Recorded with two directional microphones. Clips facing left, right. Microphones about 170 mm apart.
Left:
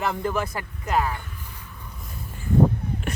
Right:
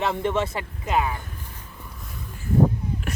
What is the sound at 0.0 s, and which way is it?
Speech, 25° right (ahead or behind).